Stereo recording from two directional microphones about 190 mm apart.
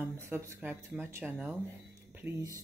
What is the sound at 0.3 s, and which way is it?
Speech, 10° right (ahead or behind).